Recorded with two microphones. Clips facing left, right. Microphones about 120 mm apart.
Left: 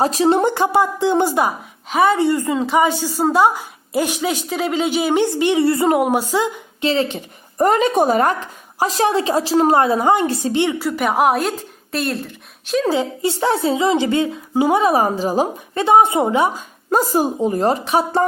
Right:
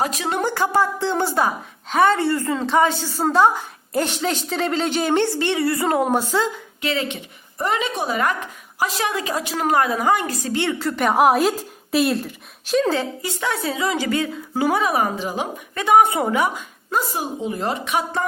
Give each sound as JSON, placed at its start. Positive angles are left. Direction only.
{"t": 0.0, "sound": "speech", "side_deg": 30}
{"t": 6.8, "sound": "a woman's voice", "side_deg": 30}
{"t": 13.2, "sound": "a woman's voice", "side_deg": 30}
{"t": 16.9, "sound": "a woman's voice", "side_deg": 40}